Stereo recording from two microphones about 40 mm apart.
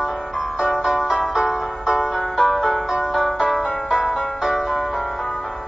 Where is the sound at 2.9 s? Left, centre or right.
Centre.